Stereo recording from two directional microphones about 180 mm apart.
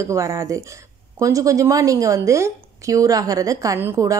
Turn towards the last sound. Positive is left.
turn(degrees=-15)  # may be behind; listen again after turning